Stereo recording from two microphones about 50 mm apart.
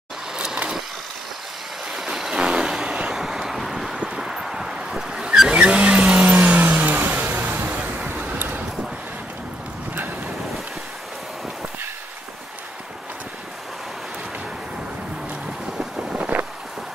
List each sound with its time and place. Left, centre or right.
0.3 s vehicle: centre
1.9 s vehicle: centre
2.3 s vehicle: centre
3.9 s vehicle: centre
4.2 s vehicle: centre; by 8.1 s right
8.2 s waves: right
16.0 s vehicle: right